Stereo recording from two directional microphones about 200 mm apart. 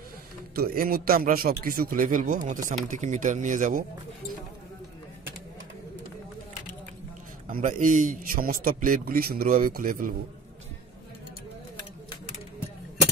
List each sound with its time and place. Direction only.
0.6 s a man's voice: 50° right (ahead or behind)
7.5 s a man's voice: 40° right (ahead or behind)